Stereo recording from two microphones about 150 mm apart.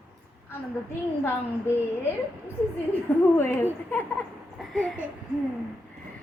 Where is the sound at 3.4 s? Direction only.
15° left (ahead or behind).